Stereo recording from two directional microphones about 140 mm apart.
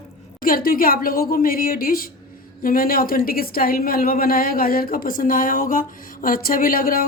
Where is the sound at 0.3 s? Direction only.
90° left.